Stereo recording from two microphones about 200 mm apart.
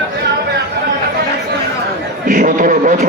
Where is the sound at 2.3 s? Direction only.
40° right (ahead or behind).